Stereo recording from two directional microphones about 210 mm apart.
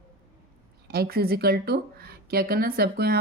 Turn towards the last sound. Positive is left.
turn(degrees=-45)  # may be behind; listen again after turning